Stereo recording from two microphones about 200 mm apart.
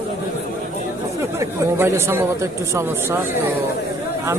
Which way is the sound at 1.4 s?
15° right (ahead or behind).